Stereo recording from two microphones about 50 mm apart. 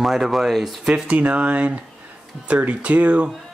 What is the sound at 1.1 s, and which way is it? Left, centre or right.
Speech, right.